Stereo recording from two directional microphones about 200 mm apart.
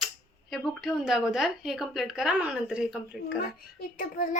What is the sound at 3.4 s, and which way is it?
Child singing, 45° left (ahead or behind).